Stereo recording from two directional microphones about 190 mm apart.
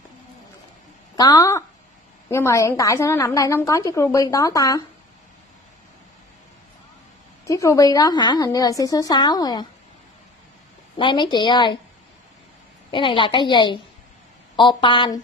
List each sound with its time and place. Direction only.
1.1 s a woman's voice: 20° left (ahead or behind)
7.4 s a woman's voice: 15° left (ahead or behind)
11.0 s a woman's voice: 25° left (ahead or behind)
12.9 s a woman's voice: 25° left (ahead or behind)